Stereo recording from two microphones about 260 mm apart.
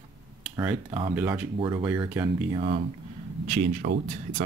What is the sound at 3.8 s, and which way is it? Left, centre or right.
Speech, right.